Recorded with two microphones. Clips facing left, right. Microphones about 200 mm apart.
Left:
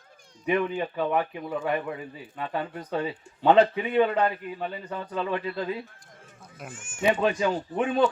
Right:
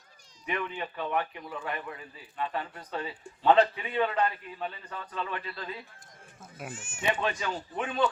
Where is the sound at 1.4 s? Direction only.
50° left (ahead or behind).